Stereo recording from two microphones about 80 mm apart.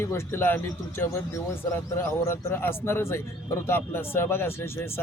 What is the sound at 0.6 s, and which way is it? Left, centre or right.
Speech, left.